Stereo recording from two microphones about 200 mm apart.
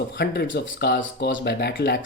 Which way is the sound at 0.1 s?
55° left (ahead or behind).